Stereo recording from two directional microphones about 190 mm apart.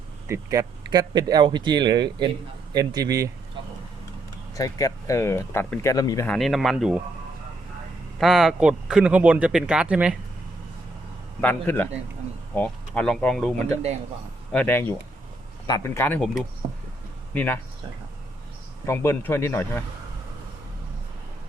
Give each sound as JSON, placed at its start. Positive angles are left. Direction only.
{"t": 0.3, "sound": "speech", "side_deg": -20}
{"t": 4.5, "sound": "speech", "side_deg": 20}
{"t": 6.2, "sound": "speech", "side_deg": 5}
{"t": 8.2, "sound": "speech", "side_deg": 0}
{"t": 11.3, "sound": "speech", "side_deg": 10}
{"t": 17.3, "sound": "speech", "side_deg": 10}
{"t": 18.9, "sound": "speech", "side_deg": 10}